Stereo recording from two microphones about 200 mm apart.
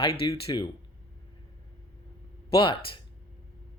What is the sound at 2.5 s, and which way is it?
Speech, 25° left (ahead or behind).